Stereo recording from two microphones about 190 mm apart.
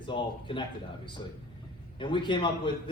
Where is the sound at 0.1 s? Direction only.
25° left (ahead or behind).